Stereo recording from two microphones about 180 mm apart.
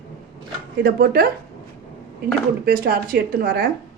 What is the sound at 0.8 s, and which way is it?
Speech, 60° right (ahead or behind).